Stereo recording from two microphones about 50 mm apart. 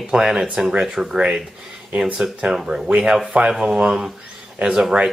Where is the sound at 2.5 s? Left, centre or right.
Centre.